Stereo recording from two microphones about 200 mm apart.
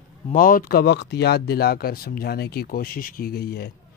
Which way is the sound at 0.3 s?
45° left (ahead or behind).